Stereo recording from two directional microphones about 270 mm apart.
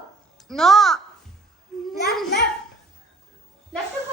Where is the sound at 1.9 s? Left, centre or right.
Left.